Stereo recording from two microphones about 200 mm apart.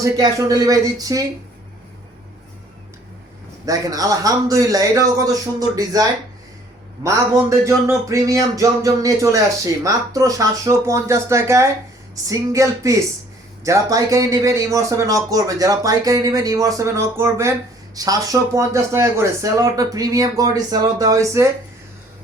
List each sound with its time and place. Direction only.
0.0 s speech: 15° right (ahead or behind)
3.7 s speech: 15° right (ahead or behind)
7.9 s speech: 15° right (ahead or behind)